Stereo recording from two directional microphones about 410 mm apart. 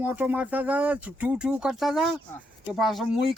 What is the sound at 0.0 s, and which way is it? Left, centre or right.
Speech, centre.